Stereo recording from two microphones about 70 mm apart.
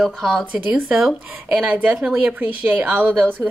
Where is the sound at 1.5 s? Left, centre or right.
Right.